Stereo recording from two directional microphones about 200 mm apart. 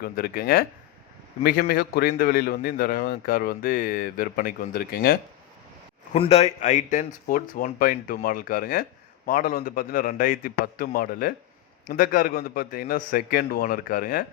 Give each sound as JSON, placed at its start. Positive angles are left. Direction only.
{"t": 0.0, "sound": "a man's voice", "side_deg": 45}
{"t": 6.1, "sound": "a man's voice", "side_deg": 30}